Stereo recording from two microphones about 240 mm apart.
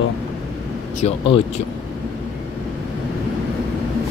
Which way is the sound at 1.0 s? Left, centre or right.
Left.